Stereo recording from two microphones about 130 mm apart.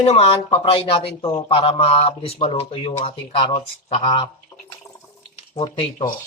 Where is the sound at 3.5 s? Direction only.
55° left (ahead or behind).